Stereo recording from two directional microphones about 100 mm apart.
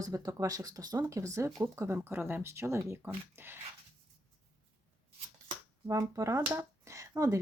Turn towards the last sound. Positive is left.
turn(degrees=-30)  # may be behind; listen again after turning